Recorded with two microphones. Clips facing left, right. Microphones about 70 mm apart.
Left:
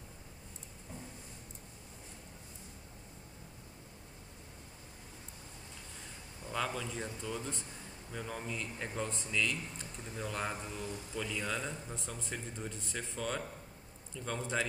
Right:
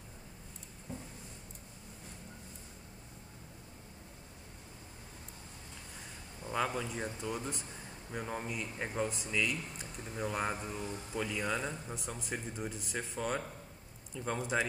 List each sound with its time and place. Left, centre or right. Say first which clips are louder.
6.5 s speech: right 2 dB; centre